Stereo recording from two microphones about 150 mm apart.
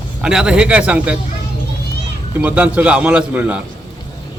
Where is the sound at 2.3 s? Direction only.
10° right (ahead or behind).